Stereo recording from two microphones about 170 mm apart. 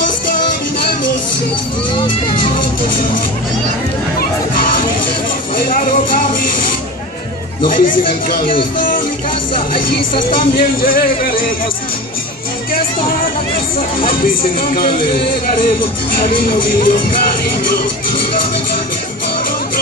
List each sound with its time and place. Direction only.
4.2 s music: 55° left (ahead or behind)
5.7 s speech: 55° left (ahead or behind)
7.7 s speech: 50° left (ahead or behind)
10.5 s speech: 60° left (ahead or behind)
14.0 s speech: 60° left (ahead or behind)
16.2 s speech: 60° left (ahead or behind)